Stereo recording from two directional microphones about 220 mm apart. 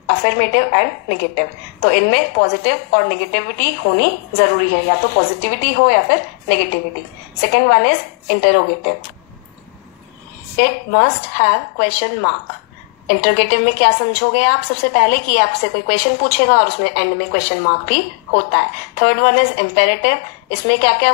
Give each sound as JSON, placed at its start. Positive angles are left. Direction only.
{"t": 0.1, "sound": "a woman's voice", "side_deg": 45}
{"t": 10.6, "sound": "a woman's voice", "side_deg": 45}